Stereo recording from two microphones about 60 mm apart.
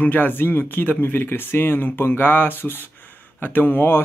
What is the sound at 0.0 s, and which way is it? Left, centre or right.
Speech, left.